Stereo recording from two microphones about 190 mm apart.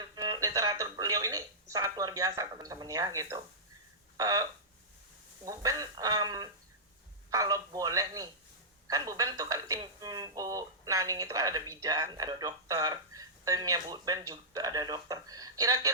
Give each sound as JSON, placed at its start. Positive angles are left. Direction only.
{"t": 0.0, "sound": "speech", "side_deg": -20}
{"t": 5.5, "sound": "speech", "side_deg": -20}